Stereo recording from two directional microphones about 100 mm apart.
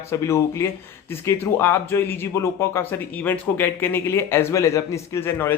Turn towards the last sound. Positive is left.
turn(degrees=25)  # may be behind; listen again after turning